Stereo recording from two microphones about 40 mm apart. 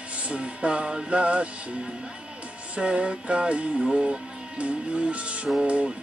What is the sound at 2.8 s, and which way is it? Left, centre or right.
Music, right.